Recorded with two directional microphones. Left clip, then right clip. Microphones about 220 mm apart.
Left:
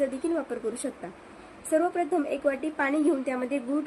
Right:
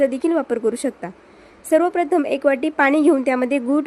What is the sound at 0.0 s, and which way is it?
A woman's voice, 50° right (ahead or behind).